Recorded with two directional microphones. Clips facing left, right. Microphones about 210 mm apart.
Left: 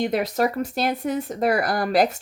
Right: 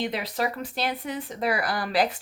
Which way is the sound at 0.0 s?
45° left (ahead or behind).